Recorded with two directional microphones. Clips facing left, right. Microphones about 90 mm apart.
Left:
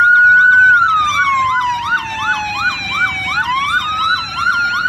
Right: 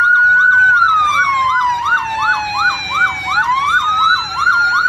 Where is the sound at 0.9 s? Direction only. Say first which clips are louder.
Right 1 dB; 15° right (ahead or behind).